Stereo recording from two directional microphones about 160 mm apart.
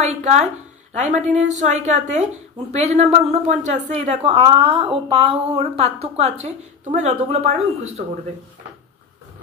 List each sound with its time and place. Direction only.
0.0 s a woman's voice: 45° right (ahead or behind)